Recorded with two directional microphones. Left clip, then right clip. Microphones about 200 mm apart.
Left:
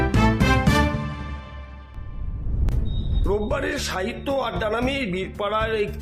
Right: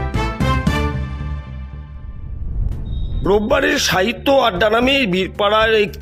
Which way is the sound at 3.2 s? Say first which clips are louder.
Right 10 dB; 50° right (ahead or behind).